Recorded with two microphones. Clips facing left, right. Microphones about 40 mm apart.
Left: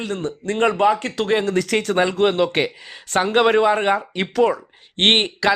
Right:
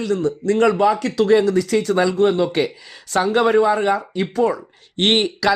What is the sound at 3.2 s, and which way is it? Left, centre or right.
Speech, left.